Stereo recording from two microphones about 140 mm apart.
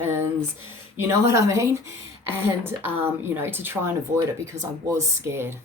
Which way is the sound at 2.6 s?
15° right (ahead or behind).